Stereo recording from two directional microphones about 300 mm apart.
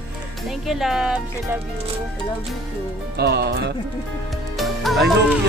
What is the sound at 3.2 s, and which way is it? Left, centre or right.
Speech, right.